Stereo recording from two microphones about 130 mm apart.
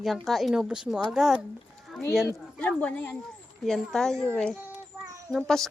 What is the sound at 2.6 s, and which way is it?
A child's voice, 10° left (ahead or behind).